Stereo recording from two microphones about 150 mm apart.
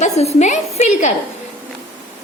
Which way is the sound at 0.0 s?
45° left (ahead or behind).